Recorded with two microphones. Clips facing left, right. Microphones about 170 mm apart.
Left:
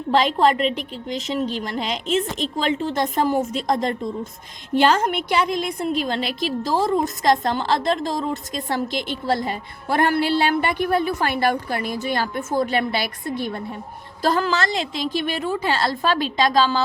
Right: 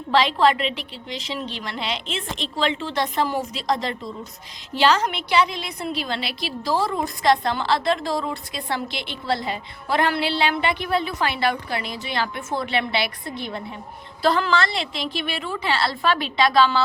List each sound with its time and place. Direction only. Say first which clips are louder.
0.1 s a woman's voice: left 1 dB; 45° left (ahead or behind)